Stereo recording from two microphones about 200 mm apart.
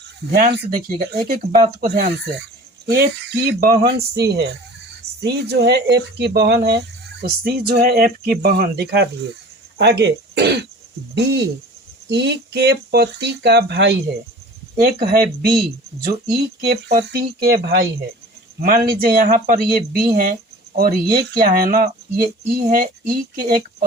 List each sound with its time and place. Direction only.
0.3 s speech: 50° right (ahead or behind)
15.0 s speech: 50° right (ahead or behind)